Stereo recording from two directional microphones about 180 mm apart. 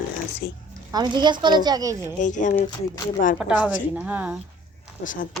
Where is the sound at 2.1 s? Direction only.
45° left (ahead or behind).